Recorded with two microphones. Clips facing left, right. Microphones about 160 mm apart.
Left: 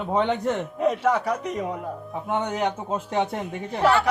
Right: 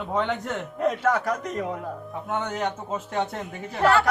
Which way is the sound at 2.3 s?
15° left (ahead or behind).